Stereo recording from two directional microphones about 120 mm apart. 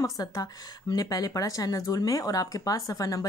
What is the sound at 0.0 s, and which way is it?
A woman's voice, 30° left (ahead or behind).